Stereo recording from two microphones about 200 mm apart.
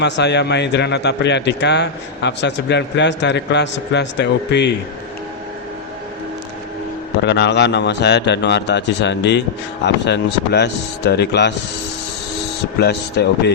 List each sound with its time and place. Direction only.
0.0 s a man's voice: 60° left (ahead or behind)
7.2 s a man's voice: 60° left (ahead or behind)
12.8 s a man's voice: 55° left (ahead or behind)